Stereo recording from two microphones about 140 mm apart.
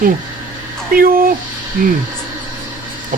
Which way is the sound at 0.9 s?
90° right.